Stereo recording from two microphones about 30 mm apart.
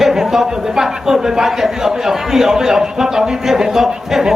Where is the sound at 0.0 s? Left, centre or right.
Centre.